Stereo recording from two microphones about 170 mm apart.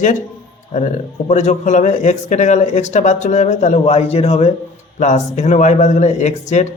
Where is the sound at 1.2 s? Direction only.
45° left (ahead or behind).